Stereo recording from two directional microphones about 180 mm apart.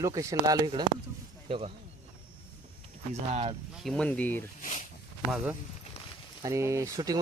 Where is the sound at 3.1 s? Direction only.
35° right (ahead or behind).